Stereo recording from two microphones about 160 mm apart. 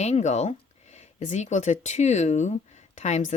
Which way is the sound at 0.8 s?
45° left (ahead or behind).